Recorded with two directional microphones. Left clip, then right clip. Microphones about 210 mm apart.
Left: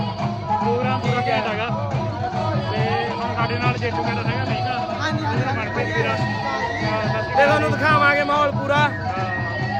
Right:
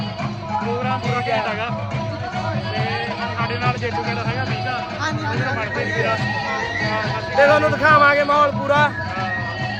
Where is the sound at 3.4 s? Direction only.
15° left (ahead or behind).